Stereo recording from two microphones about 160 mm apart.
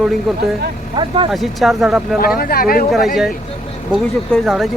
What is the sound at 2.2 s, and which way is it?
Speech, 70° left (ahead or behind).